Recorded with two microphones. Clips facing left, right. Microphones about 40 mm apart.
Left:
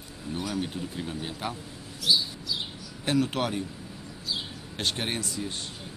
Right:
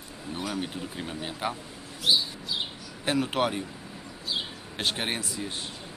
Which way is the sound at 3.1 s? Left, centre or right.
Centre.